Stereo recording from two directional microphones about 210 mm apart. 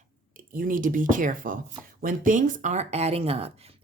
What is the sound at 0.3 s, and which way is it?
Speech, 40° right (ahead or behind).